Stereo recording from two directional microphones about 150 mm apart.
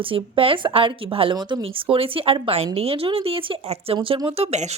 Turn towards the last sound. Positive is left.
turn(degrees=-45)  # may be behind; listen again after turning